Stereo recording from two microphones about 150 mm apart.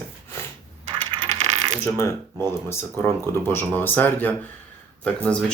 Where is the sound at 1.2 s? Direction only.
30° right (ahead or behind).